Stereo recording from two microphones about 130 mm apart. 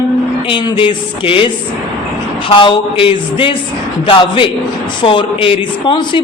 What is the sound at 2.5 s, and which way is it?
A man's voice, 40° left (ahead or behind).